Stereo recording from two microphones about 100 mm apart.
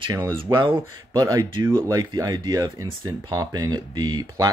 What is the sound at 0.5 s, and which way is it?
Speech, 55° right (ahead or behind).